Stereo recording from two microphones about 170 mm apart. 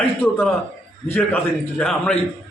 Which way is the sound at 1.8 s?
5° left (ahead or behind).